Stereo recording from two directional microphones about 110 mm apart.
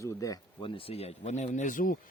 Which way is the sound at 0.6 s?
55° left (ahead or behind).